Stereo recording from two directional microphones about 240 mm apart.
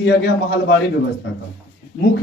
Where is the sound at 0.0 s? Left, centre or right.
Left.